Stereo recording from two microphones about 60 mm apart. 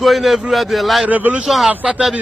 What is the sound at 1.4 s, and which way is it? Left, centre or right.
Speech, centre.